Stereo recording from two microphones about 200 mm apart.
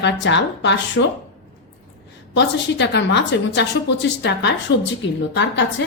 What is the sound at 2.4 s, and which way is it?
A woman's voice, 60° left (ahead or behind).